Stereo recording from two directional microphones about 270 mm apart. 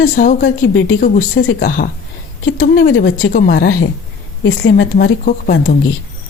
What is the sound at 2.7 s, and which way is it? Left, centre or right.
Speech, left.